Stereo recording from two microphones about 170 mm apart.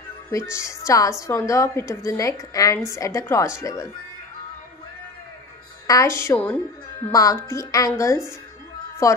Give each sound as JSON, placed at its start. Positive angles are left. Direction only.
{"t": 0.3, "sound": "a woman's voice", "side_deg": 15}
{"t": 5.9, "sound": "a woman's voice", "side_deg": 20}
{"t": 7.1, "sound": "speech", "side_deg": 20}